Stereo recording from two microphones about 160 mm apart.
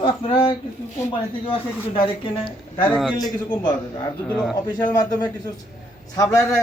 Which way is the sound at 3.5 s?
30° left (ahead or behind).